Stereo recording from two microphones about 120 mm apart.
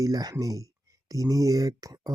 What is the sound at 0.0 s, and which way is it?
Speech, 30° right (ahead or behind).